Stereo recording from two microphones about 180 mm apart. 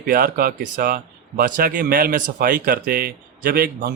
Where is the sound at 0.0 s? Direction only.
55° right (ahead or behind).